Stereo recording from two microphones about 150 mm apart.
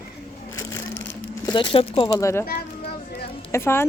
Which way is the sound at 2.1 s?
20° left (ahead or behind).